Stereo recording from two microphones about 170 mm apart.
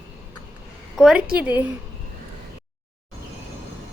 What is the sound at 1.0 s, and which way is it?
Speech, 5° right (ahead or behind).